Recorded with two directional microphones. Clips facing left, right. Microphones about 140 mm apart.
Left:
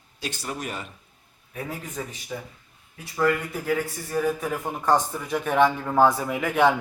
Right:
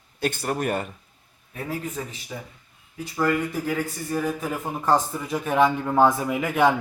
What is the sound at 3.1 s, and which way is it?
A man's voice, centre (ahead or behind).